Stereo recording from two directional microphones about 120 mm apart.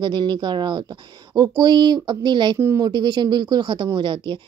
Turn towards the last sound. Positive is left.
turn(degrees=-40)  # may be behind; listen again after turning